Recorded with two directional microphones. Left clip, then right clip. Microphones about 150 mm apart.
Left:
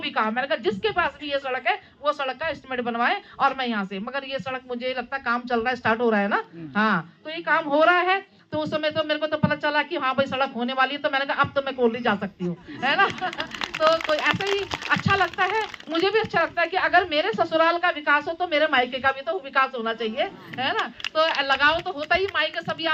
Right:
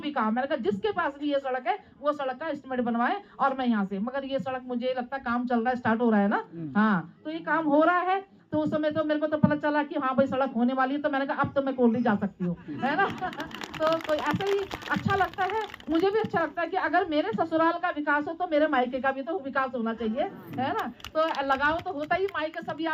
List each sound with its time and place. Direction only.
0.0 s a woman's voice: 15° left (ahead or behind)
12.8 s a woman's voice: 15° left (ahead or behind)
14.1 s a woman's voice: 20° left (ahead or behind)